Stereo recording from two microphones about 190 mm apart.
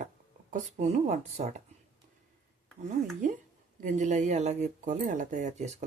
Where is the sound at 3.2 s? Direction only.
45° right (ahead or behind).